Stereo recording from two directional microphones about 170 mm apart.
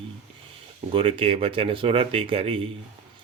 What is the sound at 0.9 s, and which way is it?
Speech, 30° right (ahead or behind).